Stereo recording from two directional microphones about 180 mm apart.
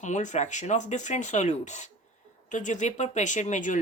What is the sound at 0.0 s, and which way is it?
Speech, 40° left (ahead or behind).